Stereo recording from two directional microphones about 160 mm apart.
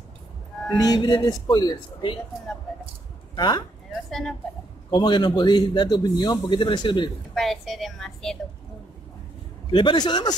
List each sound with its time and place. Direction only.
0.7 s a man's voice: 25° left (ahead or behind)
2.7 s a sound: centre (ahead or behind)
3.3 s speech: 25° left (ahead or behind)
3.9 s speech: centre (ahead or behind)
4.9 s a man's voice: 30° left (ahead or behind)
7.3 s a woman's voice: centre (ahead or behind)
9.7 s a man's voice: 30° left (ahead or behind)